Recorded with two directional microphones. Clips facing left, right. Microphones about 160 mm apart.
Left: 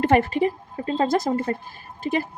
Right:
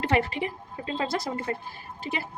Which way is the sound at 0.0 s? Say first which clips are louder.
Left 7 dB; 45° left (ahead or behind).